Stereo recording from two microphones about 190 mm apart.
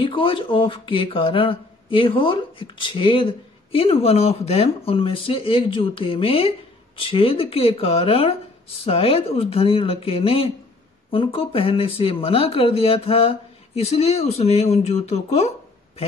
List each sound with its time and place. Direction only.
0.0 s speech: 25° left (ahead or behind)